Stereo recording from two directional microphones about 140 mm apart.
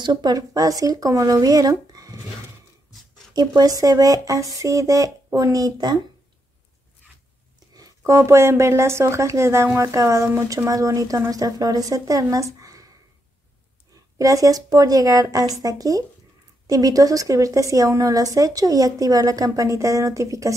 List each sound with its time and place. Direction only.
0.0 s a woman's voice: 30° right (ahead or behind)
3.3 s a woman's voice: 25° right (ahead or behind)
7.7 s a woman's voice: 20° right (ahead or behind)
14.1 s a woman's voice: 25° right (ahead or behind)